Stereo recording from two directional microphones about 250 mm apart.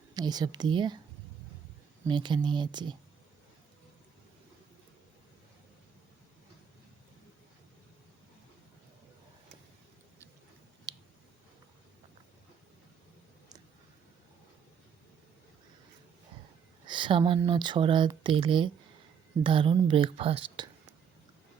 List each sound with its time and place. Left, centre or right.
0.1 s a woman's voice: centre
2.0 s speech: centre
10.9 s clicking: centre
16.8 s speech: centre